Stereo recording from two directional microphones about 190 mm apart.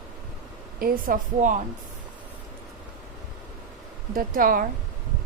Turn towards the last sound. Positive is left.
turn(degrees=-50)  # may be behind; listen again after turning